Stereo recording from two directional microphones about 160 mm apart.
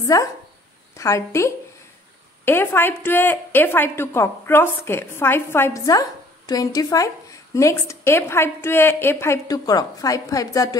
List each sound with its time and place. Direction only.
0.0 s a woman's voice: 20° left (ahead or behind)